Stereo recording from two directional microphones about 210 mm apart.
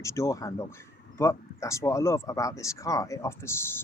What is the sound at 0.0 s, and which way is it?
Speech, 15° left (ahead or behind).